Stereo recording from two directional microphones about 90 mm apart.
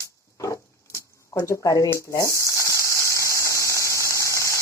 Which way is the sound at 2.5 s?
35° left (ahead or behind).